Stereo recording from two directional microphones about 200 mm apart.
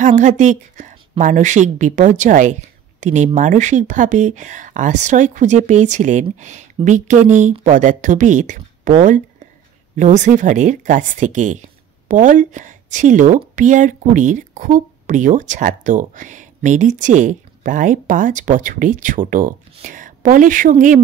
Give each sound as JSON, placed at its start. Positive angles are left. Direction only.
{"t": 0.0, "sound": "a woman's voice", "side_deg": -40}